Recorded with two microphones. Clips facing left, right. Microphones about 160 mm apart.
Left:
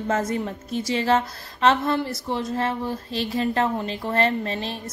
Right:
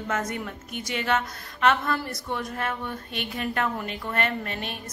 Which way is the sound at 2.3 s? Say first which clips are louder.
Left 4 dB; 25° left (ahead or behind).